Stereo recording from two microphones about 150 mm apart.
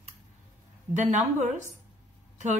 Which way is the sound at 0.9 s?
50° right (ahead or behind).